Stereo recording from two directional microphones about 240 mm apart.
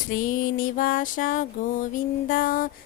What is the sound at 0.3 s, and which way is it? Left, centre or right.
Music, left.